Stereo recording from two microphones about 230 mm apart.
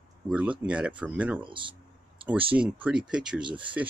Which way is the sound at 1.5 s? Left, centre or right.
Right.